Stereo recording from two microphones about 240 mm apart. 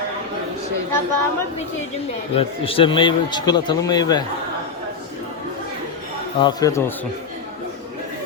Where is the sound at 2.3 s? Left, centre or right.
Left.